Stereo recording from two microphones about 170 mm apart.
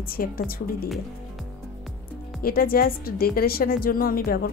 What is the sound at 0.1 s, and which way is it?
Speech, 60° left (ahead or behind).